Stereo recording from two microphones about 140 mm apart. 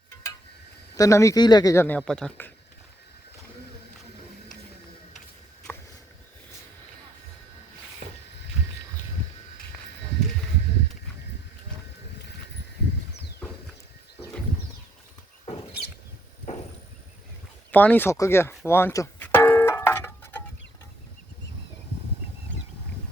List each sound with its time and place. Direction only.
0.9 s speech: 25° left (ahead or behind)
2.0 s speech: 5° left (ahead or behind)
8.0 s a sound: 60° right (ahead or behind)
17.7 s music: 10° left (ahead or behind)